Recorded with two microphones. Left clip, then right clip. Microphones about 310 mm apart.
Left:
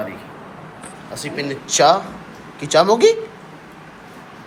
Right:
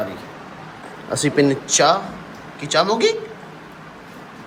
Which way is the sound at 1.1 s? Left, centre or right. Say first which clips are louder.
Right 9 dB; right.